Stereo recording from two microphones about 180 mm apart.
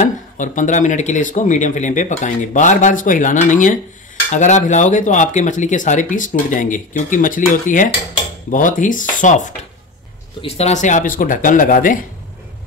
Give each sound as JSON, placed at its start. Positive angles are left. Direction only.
{"t": 0.0, "sound": "speech", "side_deg": 45}